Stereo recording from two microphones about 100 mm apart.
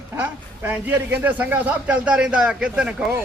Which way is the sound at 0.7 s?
20° right (ahead or behind).